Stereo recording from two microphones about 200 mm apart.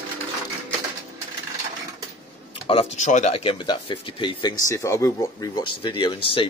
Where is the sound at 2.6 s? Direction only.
30° left (ahead or behind).